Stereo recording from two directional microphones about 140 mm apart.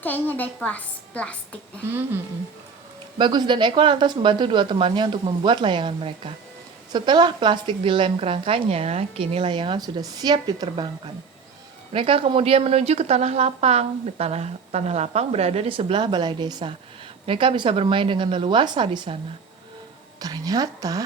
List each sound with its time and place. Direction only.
0.0 s a woman's voice: 10° left (ahead or behind)
1.9 s speech: 15° right (ahead or behind)
3.2 s a woman's voice: 35° right (ahead or behind)
11.9 s a woman's voice: 45° right (ahead or behind)
20.1 s a woman's voice: 25° right (ahead or behind)